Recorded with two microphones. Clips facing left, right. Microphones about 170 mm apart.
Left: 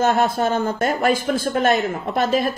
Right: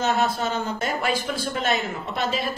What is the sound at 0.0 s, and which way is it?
A woman's voice, 50° left (ahead or behind).